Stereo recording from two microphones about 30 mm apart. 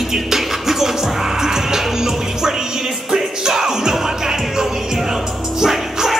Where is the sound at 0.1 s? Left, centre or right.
Centre.